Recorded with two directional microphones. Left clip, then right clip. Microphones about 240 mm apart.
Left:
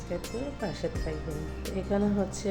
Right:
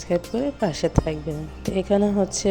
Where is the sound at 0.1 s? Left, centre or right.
Right.